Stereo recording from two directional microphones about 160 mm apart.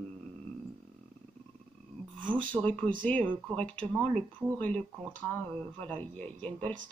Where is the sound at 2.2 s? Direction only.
30° right (ahead or behind).